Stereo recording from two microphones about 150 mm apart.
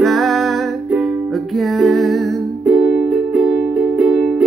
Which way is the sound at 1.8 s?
Centre (ahead or behind).